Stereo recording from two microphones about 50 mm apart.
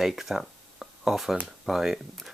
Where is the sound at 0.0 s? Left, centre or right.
Centre.